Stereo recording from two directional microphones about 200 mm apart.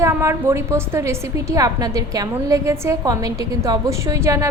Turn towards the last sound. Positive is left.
turn(degrees=-15)  # may be behind; listen again after turning